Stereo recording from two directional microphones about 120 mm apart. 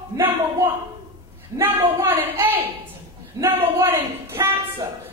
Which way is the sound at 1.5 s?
20° right (ahead or behind).